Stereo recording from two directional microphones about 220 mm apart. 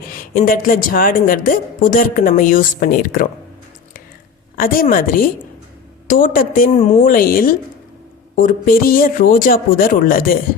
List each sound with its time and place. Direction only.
0.2 s a woman's voice: 40° left (ahead or behind)
4.5 s a woman's voice: 40° left (ahead or behind)